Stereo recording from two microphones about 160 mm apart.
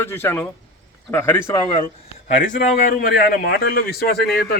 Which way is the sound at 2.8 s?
60° left (ahead or behind).